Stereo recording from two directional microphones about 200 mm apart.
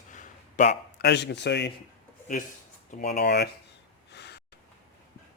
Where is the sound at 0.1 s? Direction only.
40° left (ahead or behind); by 1.7 s 60° left (ahead or behind).